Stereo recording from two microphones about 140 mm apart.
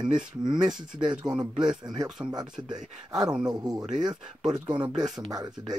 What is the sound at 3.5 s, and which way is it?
Speech, 25° right (ahead or behind).